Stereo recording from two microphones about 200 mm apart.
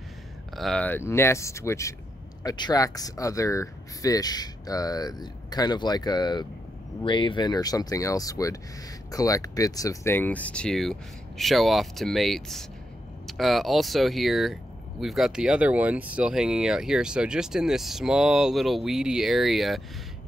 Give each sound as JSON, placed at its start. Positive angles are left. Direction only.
{"t": 0.6, "sound": "speech", "side_deg": 5}